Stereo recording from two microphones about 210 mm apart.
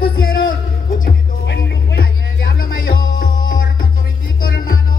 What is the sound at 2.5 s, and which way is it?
Music, 45° left (ahead or behind).